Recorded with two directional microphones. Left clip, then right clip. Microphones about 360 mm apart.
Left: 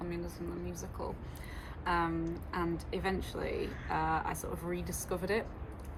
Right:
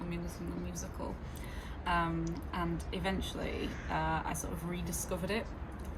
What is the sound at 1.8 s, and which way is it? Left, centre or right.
Speech, centre.